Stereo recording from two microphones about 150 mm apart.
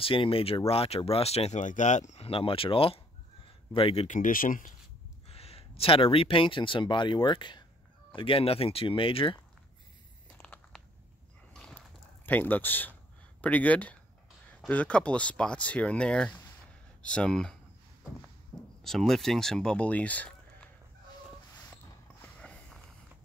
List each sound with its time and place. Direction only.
0.0 s speech: 35° left (ahead or behind)
4.2 s speech: 65° left (ahead or behind)
5.3 s speech: 40° left (ahead or behind)
10.3 s a sound: 10° left (ahead or behind)
11.5 s dog: 5° left (ahead or behind)
12.3 s speech: 10° left (ahead or behind)
18.8 s speech: centre (ahead or behind)
22.2 s walk: 10° left (ahead or behind)